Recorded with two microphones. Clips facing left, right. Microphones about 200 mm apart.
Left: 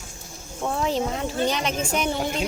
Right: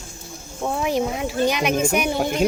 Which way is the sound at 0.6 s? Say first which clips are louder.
Right 2 dB; 10° right (ahead or behind).